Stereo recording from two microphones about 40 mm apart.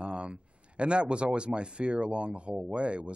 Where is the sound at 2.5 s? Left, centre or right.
Centre.